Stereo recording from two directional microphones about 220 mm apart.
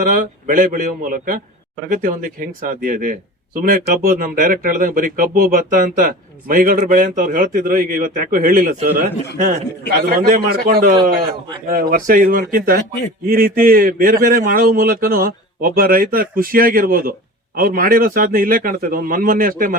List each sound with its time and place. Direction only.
0.2 s a man's voice: 35° right (ahead or behind)
10.1 s a man's voice: 40° right (ahead or behind)